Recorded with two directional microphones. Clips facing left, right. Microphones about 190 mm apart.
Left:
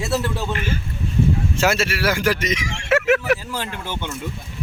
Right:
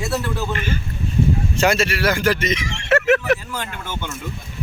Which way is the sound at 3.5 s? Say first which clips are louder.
Left 1 dB; 30° left (ahead or behind).